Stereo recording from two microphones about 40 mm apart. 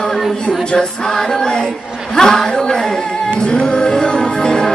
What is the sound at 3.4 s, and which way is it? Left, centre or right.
Music, left.